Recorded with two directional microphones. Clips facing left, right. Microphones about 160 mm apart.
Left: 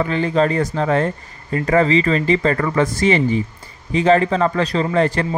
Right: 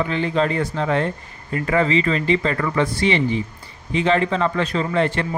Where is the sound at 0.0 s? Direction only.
40° left (ahead or behind).